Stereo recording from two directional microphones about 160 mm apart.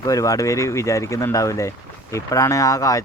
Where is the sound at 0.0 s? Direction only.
20° left (ahead or behind).